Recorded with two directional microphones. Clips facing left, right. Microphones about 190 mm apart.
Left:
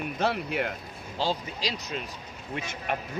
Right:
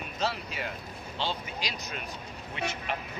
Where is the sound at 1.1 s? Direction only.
35° left (ahead or behind).